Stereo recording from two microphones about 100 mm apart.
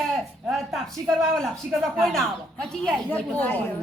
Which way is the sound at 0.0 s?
Centre (ahead or behind).